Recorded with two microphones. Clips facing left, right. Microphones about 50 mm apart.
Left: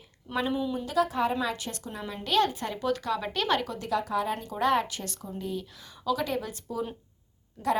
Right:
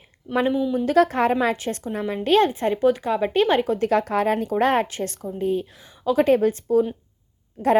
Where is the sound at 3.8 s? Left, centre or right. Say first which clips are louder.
Right 8 dB; right.